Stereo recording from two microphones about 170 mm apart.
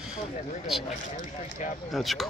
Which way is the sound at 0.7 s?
Centre (ahead or behind).